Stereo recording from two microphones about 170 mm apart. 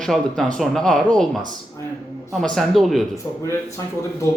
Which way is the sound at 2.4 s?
5° left (ahead or behind).